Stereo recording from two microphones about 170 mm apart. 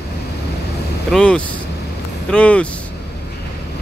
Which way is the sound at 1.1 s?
5° left (ahead or behind).